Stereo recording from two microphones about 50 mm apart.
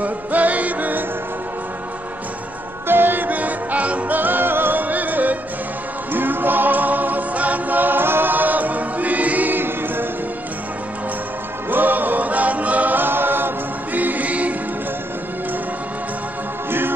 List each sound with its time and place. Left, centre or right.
0.0 s music: right
2.9 s music: right
11.7 s music: right
13.9 s choir: right